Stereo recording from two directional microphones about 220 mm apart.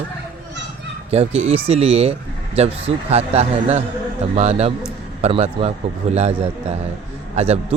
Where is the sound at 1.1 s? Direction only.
30° right (ahead or behind).